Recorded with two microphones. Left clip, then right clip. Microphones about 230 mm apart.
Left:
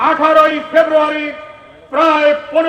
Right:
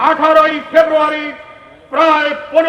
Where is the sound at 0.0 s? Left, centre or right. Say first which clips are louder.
Even; right.